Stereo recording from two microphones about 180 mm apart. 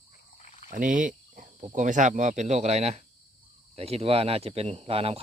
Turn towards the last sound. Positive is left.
turn(degrees=-30)  # may be behind; listen again after turning